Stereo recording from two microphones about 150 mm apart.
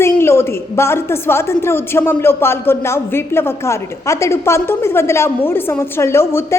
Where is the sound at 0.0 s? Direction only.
15° left (ahead or behind).